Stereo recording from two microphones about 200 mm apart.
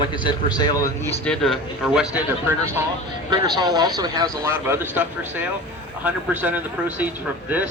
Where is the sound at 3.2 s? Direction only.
20° right (ahead or behind).